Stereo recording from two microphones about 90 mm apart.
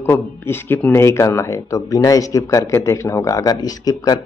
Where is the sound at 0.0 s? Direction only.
25° left (ahead or behind).